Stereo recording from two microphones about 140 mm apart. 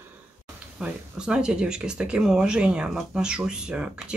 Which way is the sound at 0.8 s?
5° right (ahead or behind).